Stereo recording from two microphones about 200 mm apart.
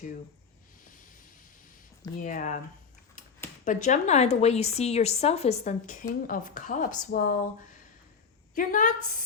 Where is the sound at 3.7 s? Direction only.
35° left (ahead or behind).